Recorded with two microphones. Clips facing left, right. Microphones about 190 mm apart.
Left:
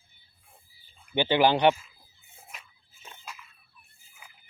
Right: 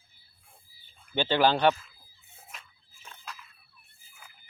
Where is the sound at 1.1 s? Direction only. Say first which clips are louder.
Left 2 dB; 15° left (ahead or behind).